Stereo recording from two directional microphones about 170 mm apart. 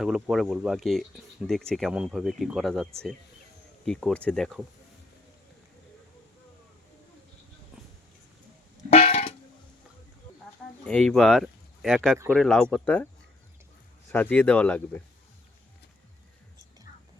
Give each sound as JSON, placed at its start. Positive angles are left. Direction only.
{"t": 0.0, "sound": "speech", "side_deg": 0}
{"t": 8.9, "sound": "vehicle horn", "side_deg": 40}
{"t": 10.8, "sound": "speech", "side_deg": 5}
{"t": 14.1, "sound": "speech", "side_deg": 10}